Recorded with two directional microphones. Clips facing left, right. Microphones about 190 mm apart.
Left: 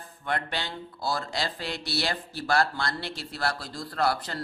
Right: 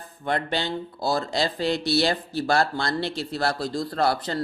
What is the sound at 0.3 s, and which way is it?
A man's voice, 25° right (ahead or behind).